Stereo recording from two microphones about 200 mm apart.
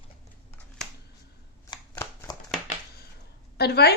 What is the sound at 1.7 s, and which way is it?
Shuffling cards, 15° left (ahead or behind).